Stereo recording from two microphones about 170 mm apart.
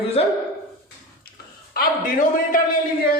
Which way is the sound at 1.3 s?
65° left (ahead or behind).